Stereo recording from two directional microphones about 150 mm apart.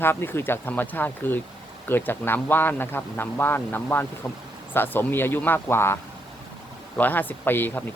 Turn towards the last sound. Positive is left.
turn(degrees=15)  # may be behind; listen again after turning